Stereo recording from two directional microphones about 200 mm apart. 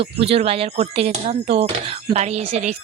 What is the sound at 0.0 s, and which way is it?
Speech, 30° right (ahead or behind).